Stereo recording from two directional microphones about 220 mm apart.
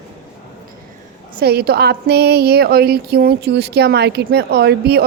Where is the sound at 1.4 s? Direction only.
45° right (ahead or behind).